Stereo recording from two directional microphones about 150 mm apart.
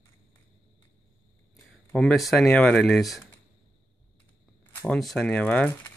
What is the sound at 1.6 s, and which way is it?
Speech, centre (ahead or behind).